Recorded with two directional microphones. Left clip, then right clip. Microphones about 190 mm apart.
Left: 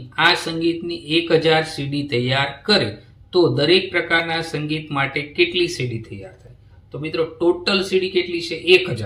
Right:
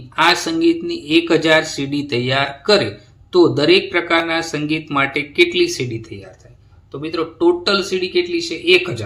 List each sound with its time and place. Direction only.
0.2 s speech: 30° right (ahead or behind)
7.0 s speech: 25° right (ahead or behind)